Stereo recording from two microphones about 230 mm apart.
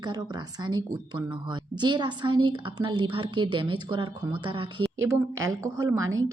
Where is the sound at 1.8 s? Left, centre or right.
Centre.